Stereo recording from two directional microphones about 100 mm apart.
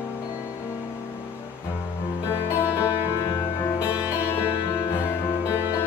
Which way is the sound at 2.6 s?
15° right (ahead or behind).